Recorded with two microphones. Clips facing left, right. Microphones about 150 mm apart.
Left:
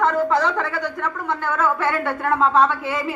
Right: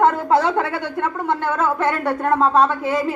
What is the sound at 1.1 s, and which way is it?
A woman's voice, 25° right (ahead or behind).